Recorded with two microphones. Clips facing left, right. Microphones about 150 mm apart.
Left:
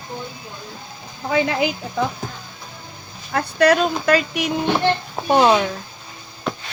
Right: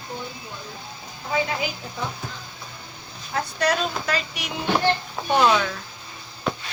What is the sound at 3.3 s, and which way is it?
Speech, 60° left (ahead or behind).